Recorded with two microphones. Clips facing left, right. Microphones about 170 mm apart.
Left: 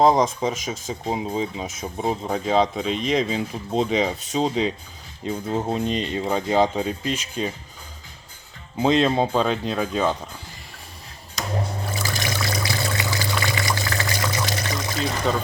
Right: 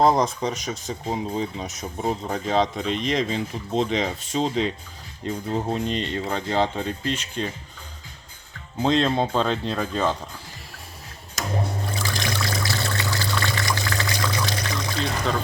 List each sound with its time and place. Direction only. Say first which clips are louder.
0.0 s speech: left 2 dB; centre (ahead or behind)
8.8 s speech: left 2 dB; 5° left (ahead or behind)
11.9 s trickle: even; 5° left (ahead or behind)
12.5 s water: left 1 dB; 10° left (ahead or behind)